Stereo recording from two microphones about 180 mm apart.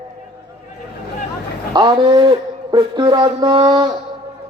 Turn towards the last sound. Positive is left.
turn(degrees=-25)  # may be behind; listen again after turning